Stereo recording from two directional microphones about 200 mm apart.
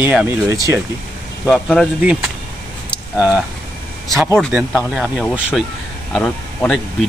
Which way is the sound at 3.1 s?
5° right (ahead or behind).